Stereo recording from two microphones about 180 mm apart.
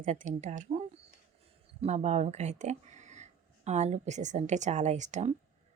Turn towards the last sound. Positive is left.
turn(degrees=-40)  # may be behind; listen again after turning